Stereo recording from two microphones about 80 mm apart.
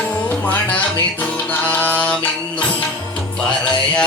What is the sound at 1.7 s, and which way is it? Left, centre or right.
Mantra, centre.